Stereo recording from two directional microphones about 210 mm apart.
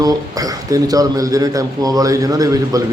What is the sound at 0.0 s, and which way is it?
A man's voice, 15° right (ahead or behind).